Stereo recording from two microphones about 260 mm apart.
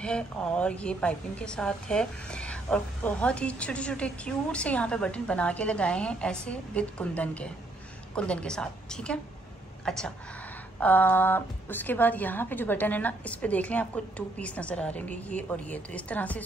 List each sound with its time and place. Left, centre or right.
0.0 s a woman's voice: centre